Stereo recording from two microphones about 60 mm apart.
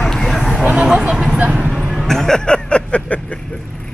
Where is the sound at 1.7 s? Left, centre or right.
Centre.